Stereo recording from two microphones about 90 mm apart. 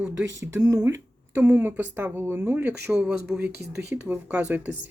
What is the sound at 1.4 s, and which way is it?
A woman's voice, 20° right (ahead or behind).